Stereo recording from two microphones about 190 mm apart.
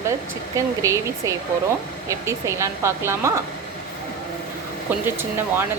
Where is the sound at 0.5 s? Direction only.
15° right (ahead or behind).